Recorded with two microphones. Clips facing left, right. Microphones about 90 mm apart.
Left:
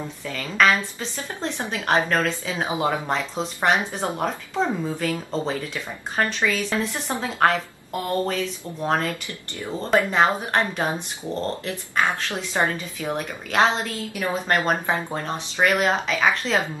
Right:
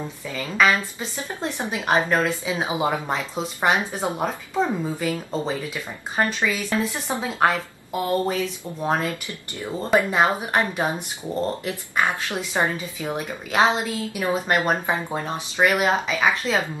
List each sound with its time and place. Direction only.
0.3 s a woman's voice: 10° right (ahead or behind)